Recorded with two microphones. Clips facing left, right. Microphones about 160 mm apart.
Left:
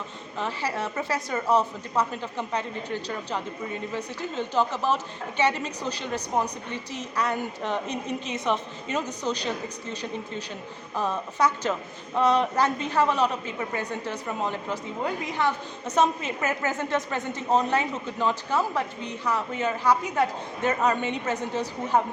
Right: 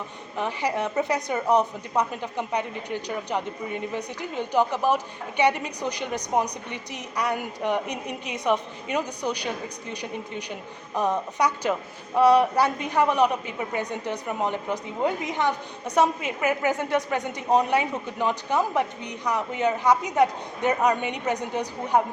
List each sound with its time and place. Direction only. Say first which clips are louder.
0.3 s a woman's voice: right 3 dB; 15° right (ahead or behind)